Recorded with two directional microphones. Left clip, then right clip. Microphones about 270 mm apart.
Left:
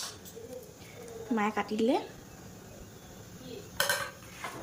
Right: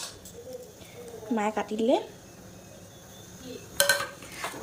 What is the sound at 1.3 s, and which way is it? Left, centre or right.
Speech, centre.